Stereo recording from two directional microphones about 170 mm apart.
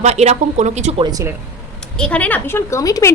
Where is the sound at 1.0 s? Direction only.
20° right (ahead or behind).